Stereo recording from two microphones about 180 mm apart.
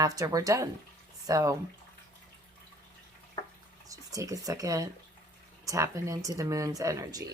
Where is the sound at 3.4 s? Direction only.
25° left (ahead or behind).